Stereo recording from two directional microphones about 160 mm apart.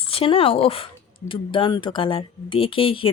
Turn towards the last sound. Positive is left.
turn(degrees=35)  # may be behind; listen again after turning